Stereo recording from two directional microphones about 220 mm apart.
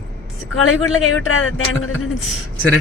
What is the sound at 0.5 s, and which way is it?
A man's voice, 70° left (ahead or behind).